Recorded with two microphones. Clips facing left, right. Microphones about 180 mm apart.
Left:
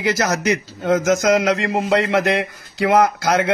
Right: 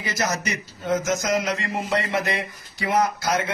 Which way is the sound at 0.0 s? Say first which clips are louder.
Left 7 dB; 80° left.